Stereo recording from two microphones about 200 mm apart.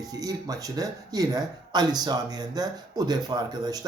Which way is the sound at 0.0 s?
20° right (ahead or behind).